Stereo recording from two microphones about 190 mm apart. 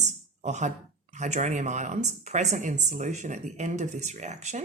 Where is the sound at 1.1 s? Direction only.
40° right (ahead or behind).